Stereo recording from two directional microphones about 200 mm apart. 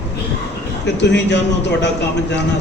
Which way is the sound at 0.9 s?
60° left (ahead or behind).